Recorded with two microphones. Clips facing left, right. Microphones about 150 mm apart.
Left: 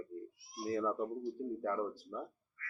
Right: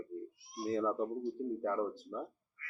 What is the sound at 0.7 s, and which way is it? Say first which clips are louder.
Speech: right 2 dB; 20° right (ahead or behind).